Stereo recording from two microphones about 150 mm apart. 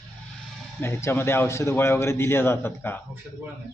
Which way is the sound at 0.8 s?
15° left (ahead or behind).